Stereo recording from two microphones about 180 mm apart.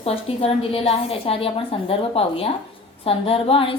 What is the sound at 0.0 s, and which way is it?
A woman's voice, 30° left (ahead or behind).